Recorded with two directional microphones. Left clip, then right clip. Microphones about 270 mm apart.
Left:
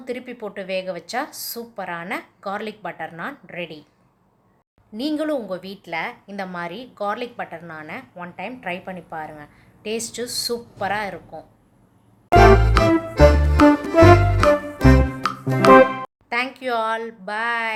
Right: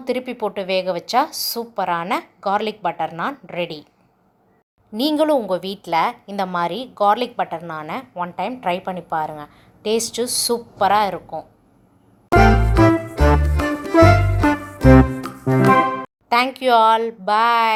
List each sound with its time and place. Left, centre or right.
0.0 s a woman's voice: centre
4.9 s a woman's voice: centre
12.4 s music: centre
16.3 s a woman's voice: centre